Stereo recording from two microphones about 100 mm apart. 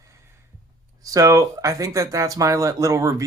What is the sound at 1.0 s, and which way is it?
Speech, 35° right (ahead or behind).